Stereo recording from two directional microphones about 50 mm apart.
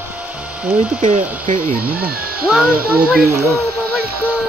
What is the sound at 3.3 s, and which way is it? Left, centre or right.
Speech, right.